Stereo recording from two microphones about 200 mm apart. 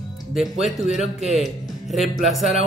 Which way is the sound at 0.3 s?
Centre (ahead or behind).